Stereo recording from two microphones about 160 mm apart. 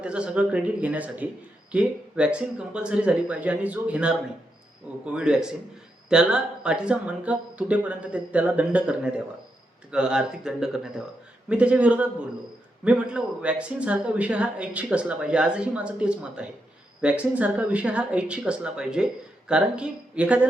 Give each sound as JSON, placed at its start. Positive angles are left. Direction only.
{"t": 0.0, "sound": "speech", "side_deg": -5}
{"t": 5.1, "sound": "speech", "side_deg": -5}